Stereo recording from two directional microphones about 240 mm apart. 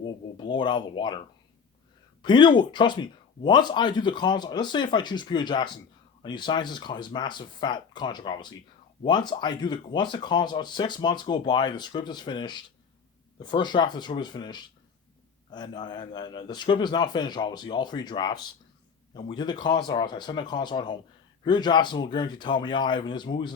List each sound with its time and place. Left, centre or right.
0.0 s speech: centre
2.2 s speech: centre